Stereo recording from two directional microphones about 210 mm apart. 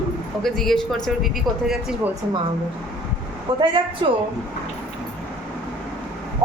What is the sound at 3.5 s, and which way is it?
Speech, 20° right (ahead or behind).